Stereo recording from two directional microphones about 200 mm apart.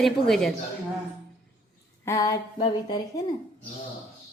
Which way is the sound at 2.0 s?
15° left (ahead or behind).